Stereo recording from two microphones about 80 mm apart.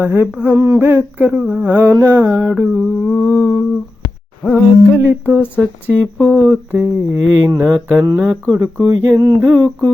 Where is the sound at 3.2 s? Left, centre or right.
Left.